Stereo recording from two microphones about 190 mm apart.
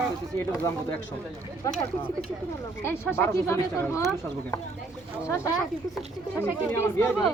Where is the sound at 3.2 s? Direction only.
15° left (ahead or behind).